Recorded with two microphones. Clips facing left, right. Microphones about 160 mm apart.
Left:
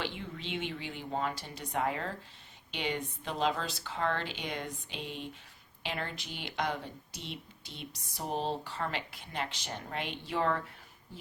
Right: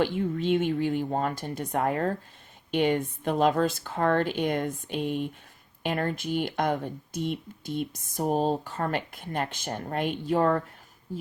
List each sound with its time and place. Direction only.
0.0 s speech: 50° right (ahead or behind)